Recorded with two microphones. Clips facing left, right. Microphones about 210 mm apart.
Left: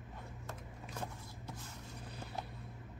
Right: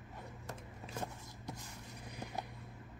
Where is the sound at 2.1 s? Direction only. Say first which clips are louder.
Right 4 dB; 15° right (ahead or behind).